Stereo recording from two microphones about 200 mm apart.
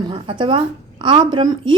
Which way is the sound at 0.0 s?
25° right (ahead or behind).